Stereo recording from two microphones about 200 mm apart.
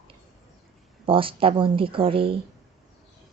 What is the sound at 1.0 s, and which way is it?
Speech, 25° right (ahead or behind).